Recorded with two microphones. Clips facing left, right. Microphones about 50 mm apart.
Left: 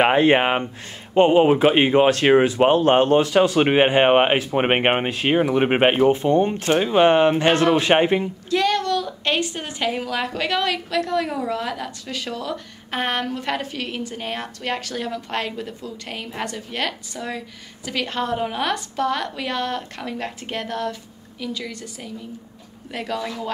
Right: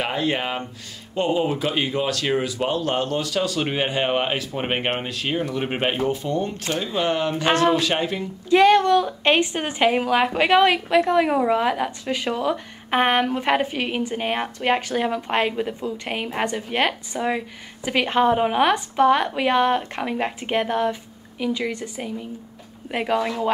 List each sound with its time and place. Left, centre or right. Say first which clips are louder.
0.0 s speech: left 8 dB; left
8.5 s a woman's voice: right 7 dB; right